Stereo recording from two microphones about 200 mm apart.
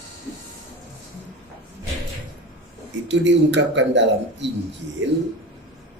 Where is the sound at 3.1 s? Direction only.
65° right (ahead or behind).